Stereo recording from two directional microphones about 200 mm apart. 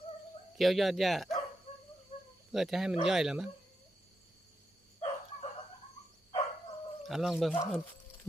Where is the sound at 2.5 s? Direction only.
Centre (ahead or behind).